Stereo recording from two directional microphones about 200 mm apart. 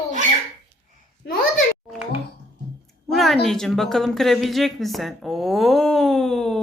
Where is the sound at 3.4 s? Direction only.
5° left (ahead or behind).